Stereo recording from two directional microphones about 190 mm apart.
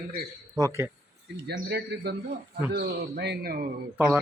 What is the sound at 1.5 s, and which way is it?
A man's voice, 60° right (ahead or behind).